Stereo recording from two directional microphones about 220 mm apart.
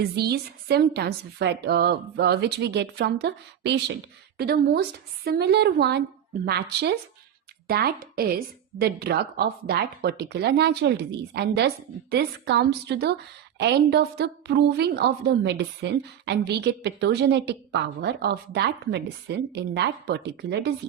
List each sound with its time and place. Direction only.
0.2 s a woman's voice: 45° right (ahead or behind)